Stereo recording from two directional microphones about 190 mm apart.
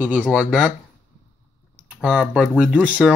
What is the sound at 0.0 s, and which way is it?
Speech, 5° right (ahead or behind).